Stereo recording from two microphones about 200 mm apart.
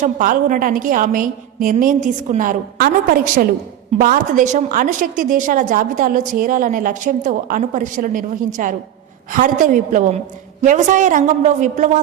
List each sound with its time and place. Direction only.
0.0 s a woman's voice: 40° right (ahead or behind)